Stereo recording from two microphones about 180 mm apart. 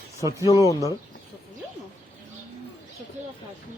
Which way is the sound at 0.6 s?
20° left (ahead or behind).